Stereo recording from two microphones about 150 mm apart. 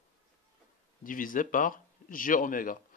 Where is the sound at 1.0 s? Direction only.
65° left (ahead or behind).